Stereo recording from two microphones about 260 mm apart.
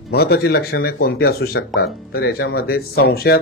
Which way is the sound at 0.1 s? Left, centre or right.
Left.